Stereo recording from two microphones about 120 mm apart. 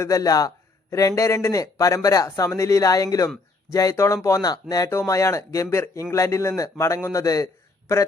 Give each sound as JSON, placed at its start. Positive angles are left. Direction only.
{"t": 0.0, "sound": "speech", "side_deg": 30}